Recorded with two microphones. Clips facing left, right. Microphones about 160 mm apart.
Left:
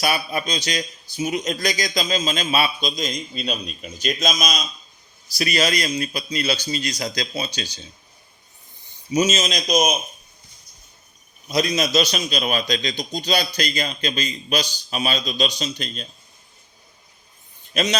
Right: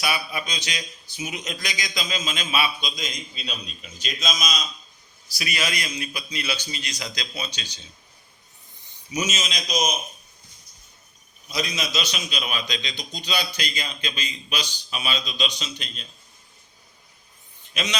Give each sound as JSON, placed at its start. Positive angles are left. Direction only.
{"t": 0.0, "sound": "a man's voice", "side_deg": 40}
{"t": 5.4, "sound": "a man's voice", "side_deg": 35}
{"t": 9.3, "sound": "a man's voice", "side_deg": 45}
{"t": 11.7, "sound": "a man's voice", "side_deg": 40}